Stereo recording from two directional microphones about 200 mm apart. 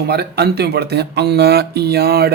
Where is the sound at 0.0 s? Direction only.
55° right (ahead or behind).